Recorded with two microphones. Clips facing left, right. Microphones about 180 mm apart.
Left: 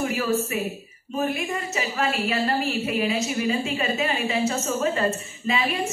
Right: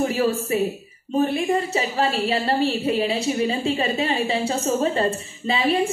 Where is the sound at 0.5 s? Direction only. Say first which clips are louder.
Right 6 dB; 30° right (ahead or behind).